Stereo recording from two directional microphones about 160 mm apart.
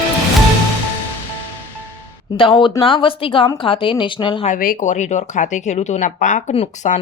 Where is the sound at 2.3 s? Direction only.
30° left (ahead or behind).